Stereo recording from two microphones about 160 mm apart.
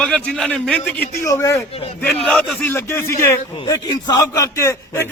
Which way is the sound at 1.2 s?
20° left (ahead or behind).